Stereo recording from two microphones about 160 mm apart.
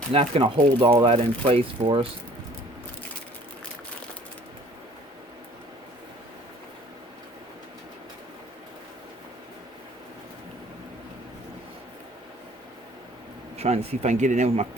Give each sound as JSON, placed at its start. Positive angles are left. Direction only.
{"t": 0.1, "sound": "speech", "side_deg": -35}
{"t": 13.6, "sound": "speech", "side_deg": -40}